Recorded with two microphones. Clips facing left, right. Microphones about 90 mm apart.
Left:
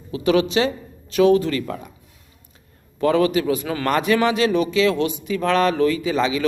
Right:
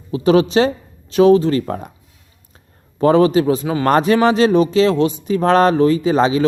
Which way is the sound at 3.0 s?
30° right (ahead or behind).